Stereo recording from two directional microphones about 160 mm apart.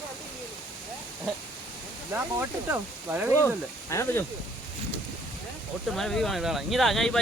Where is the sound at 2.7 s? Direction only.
10° right (ahead or behind).